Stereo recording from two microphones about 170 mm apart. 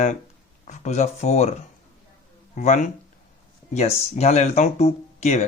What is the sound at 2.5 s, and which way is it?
Speech, 50° left (ahead or behind).